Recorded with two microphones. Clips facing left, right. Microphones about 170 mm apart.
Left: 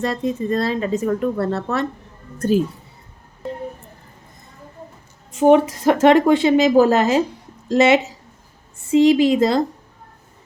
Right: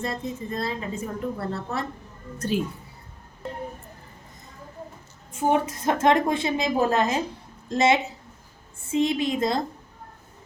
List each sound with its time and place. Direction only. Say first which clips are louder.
0.0 s a woman's voice: left 9 dB; 85° left
2.4 s speech: left 8 dB; 50° left (ahead or behind)
5.3 s a woman's voice: left 10 dB; 80° left